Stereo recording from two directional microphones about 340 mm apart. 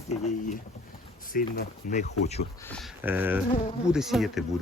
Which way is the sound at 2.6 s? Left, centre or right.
Centre.